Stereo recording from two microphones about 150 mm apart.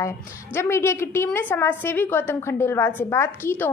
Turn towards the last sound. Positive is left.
turn(degrees=15)  # may be behind; listen again after turning